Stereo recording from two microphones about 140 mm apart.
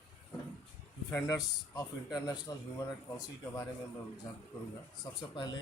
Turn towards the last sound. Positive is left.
turn(degrees=30)  # may be behind; listen again after turning